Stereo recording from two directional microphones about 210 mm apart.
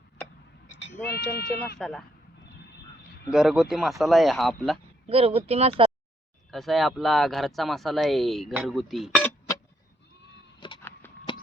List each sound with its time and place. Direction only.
1.0 s speech: 50° left (ahead or behind)
1.8 s speech: centre (ahead or behind)
3.3 s speech: 5° right (ahead or behind)
5.0 s speech: 30° right (ahead or behind)
6.5 s speech: centre (ahead or behind)
10.6 s a sound: 20° left (ahead or behind)